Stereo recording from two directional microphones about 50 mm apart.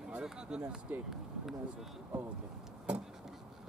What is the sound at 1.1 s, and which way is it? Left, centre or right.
Speech, centre.